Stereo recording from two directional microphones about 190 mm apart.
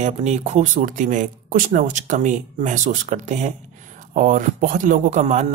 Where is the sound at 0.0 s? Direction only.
35° right (ahead or behind).